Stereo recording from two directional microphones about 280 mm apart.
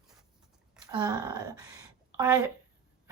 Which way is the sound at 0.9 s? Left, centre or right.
Centre.